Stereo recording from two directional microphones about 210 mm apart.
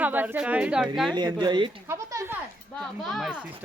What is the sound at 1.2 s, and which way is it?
Speech, 20° right (ahead or behind).